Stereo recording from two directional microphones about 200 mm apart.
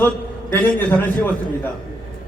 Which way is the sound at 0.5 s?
10° left (ahead or behind).